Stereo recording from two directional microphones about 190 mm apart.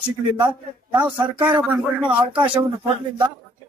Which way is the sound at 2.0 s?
25° right (ahead or behind).